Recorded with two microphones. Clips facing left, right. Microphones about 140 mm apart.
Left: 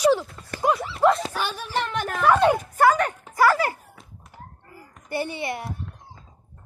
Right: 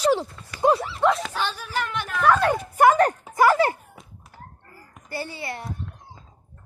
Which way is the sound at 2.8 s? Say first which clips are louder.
Right 2 dB; 15° right (ahead or behind).